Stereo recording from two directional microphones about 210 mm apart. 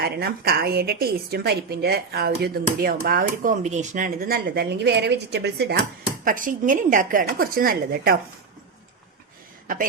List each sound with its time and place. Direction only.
0.0 s a woman's voice: 50° right (ahead or behind)
6.2 s a woman's voice: 40° right (ahead or behind)